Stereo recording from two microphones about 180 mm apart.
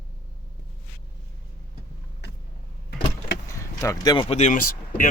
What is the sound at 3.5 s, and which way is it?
Speech, 15° left (ahead or behind).